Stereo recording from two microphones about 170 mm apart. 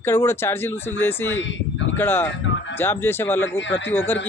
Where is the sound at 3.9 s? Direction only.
10° left (ahead or behind).